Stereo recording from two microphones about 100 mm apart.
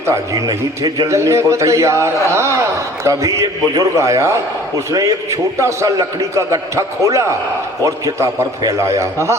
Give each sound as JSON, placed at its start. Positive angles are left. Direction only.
{"t": 0.0, "sound": "a man's voice", "side_deg": -30}